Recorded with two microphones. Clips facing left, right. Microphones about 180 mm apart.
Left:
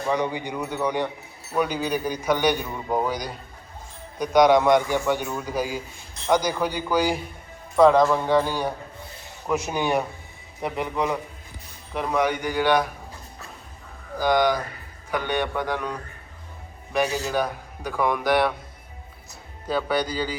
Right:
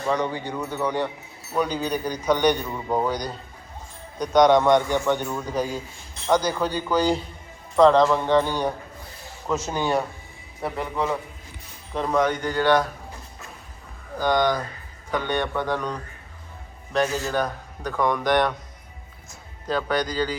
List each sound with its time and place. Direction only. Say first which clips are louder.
0.1 s a man's voice: even; 15° left (ahead or behind)
14.2 s a man's voice: left 1 dB; 10° left (ahead or behind)
19.6 s a man's voice: even; 10° left (ahead or behind)